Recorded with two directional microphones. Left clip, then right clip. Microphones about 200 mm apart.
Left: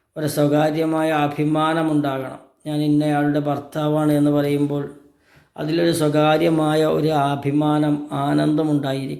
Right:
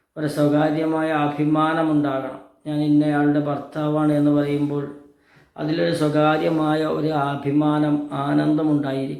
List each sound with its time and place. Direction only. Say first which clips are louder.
0.2 s speech: left 1 dB; 45° left (ahead or behind)